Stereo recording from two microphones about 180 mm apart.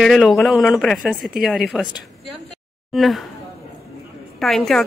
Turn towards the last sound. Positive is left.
turn(degrees=0)  # may be behind; listen again after turning